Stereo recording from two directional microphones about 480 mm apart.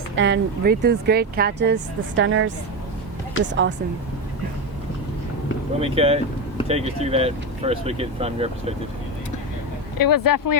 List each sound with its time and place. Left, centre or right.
0.2 s speech: right
5.8 s speech: centre
10.0 s speech: left